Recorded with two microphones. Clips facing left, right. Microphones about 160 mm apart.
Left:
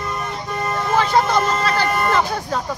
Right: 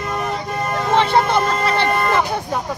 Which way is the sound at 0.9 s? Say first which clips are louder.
Right 1 dB; 25° right (ahead or behind).